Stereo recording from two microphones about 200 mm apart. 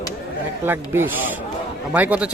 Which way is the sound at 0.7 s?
10° right (ahead or behind).